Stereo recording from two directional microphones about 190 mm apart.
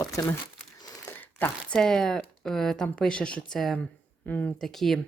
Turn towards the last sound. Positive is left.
turn(degrees=0)  # may be behind; listen again after turning